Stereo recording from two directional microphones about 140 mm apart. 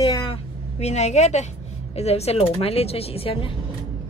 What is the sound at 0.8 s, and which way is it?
Speech, 55° left (ahead or behind).